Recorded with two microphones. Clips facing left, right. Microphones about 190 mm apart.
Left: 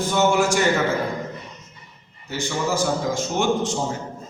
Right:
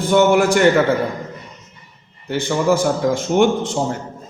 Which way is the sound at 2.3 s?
55° right (ahead or behind).